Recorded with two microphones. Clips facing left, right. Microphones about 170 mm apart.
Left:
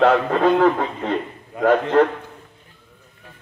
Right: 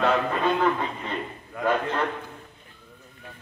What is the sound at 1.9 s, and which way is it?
Speech, 85° left.